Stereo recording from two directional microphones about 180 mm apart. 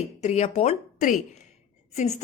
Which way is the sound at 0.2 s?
40° left (ahead or behind).